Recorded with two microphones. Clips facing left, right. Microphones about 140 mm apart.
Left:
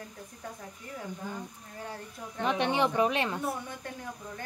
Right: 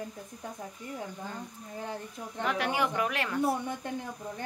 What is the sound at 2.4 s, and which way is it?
A woman's voice, 20° left (ahead or behind).